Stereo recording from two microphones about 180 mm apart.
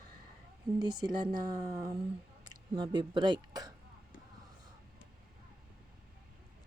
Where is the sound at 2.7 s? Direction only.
25° right (ahead or behind).